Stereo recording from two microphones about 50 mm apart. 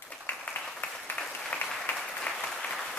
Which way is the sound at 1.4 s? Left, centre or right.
Centre.